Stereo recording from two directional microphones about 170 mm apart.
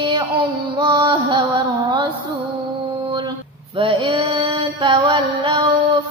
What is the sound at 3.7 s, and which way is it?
Music, 30° right (ahead or behind).